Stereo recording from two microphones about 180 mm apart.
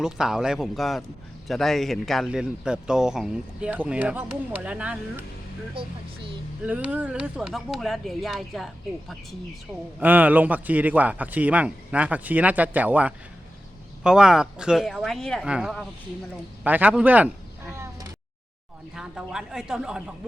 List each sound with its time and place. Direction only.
0.0 s speech: 5° right (ahead or behind)
6.6 s a man's voice: 10° right (ahead or behind)
18.9 s speech: 5° right (ahead or behind)